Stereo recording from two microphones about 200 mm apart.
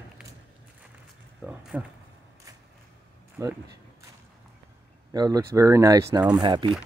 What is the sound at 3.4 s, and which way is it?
Speech, 15° right (ahead or behind).